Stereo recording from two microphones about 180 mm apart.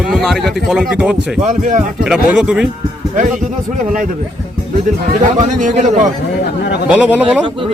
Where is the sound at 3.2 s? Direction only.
45° right (ahead or behind).